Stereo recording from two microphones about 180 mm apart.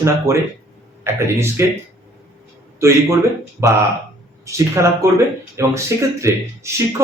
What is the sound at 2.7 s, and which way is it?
Speech, 15° right (ahead or behind).